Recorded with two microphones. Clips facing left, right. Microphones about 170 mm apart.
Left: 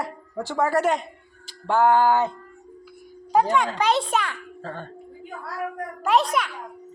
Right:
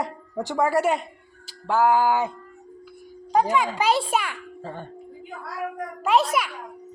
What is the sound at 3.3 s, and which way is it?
A woman's voice, centre (ahead or behind).